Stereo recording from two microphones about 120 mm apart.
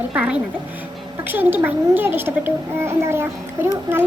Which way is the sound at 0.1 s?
10° right (ahead or behind).